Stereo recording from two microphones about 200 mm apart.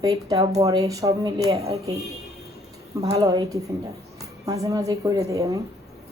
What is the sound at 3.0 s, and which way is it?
A woman's voice, 20° right (ahead or behind).